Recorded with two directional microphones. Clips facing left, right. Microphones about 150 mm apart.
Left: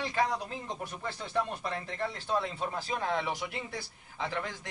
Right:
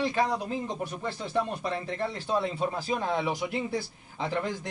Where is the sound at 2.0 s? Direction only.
15° right (ahead or behind).